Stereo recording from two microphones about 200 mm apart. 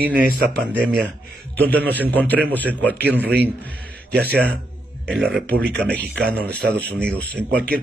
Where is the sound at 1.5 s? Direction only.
10° left (ahead or behind).